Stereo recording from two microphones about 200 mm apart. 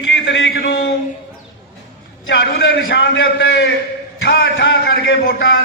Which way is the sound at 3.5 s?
75° left (ahead or behind).